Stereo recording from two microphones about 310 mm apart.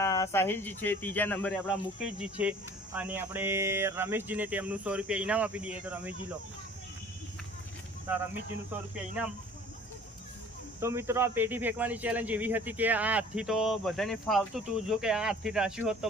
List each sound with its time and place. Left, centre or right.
0.0 s speech: centre
8.7 s speech: centre
10.8 s speech: centre